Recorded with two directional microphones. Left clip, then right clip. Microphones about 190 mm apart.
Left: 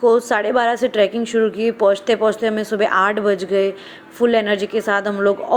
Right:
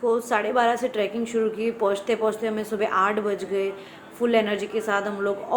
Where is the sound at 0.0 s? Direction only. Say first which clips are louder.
Left 8 dB; 40° left (ahead or behind).